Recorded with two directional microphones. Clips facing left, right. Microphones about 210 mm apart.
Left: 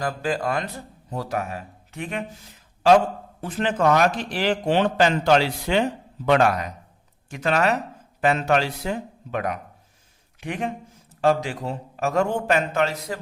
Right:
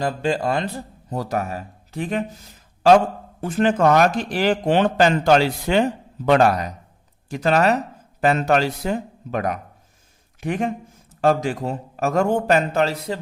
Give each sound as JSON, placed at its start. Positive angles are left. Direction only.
{"t": 0.0, "sound": "speech", "side_deg": -25}
{"t": 1.1, "sound": "speech", "side_deg": -40}
{"t": 3.4, "sound": "speech", "side_deg": -45}